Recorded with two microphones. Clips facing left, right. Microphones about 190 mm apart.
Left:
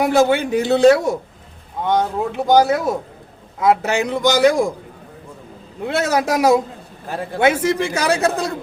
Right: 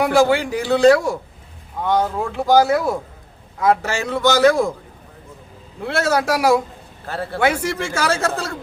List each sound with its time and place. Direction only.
0.0 s a man's voice: 20° left (ahead or behind)
5.8 s a man's voice: 20° left (ahead or behind)